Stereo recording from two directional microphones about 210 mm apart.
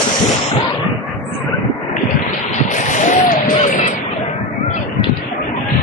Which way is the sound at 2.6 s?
35° left (ahead or behind).